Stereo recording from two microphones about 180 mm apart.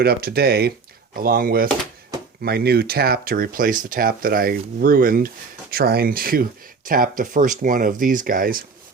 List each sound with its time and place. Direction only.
0.0 s speech: 60° right (ahead or behind)